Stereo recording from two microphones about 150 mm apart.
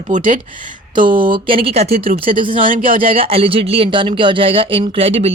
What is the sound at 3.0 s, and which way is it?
Speech, 40° right (ahead or behind).